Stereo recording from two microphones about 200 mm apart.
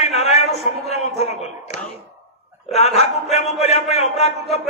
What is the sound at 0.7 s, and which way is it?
Speech, 35° left (ahead or behind).